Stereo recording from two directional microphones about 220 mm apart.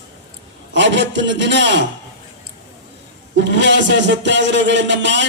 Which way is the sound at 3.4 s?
55° right (ahead or behind).